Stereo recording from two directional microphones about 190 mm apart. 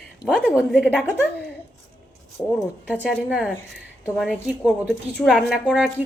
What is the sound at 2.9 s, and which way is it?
Speech, 5° right (ahead or behind).